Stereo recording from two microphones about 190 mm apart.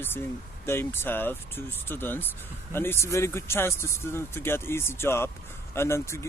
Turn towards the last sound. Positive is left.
turn(degrees=15)  # may be behind; listen again after turning